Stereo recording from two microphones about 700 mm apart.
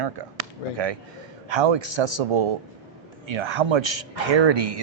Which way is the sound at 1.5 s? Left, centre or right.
Right.